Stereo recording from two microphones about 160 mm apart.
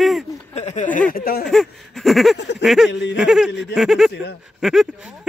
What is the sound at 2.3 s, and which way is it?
Speech, 90° left.